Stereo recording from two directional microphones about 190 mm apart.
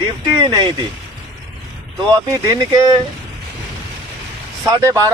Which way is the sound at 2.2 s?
20° right (ahead or behind).